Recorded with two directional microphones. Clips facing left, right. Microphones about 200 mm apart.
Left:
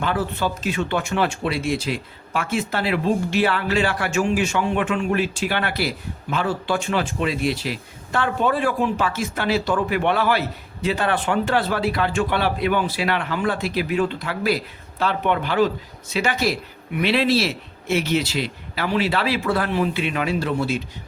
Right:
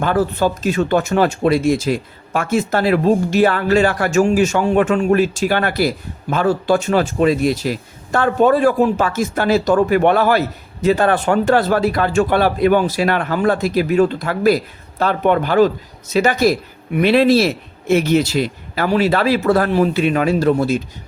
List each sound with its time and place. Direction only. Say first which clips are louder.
0.0 s speech: right 7 dB; 45° right (ahead or behind)